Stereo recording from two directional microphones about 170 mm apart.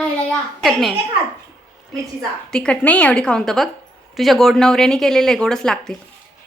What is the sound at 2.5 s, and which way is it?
A woman's voice, 5° left (ahead or behind).